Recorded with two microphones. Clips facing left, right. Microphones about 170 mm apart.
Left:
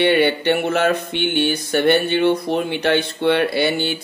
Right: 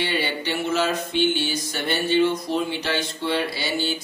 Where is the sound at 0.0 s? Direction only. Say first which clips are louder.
Left 10 dB; 60° left (ahead or behind).